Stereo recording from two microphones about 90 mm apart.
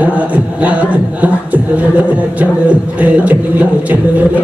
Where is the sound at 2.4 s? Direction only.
15° right (ahead or behind).